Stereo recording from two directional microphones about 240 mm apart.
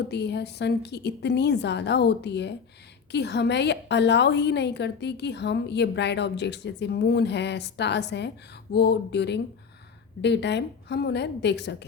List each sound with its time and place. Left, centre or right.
0.1 s a woman's voice: left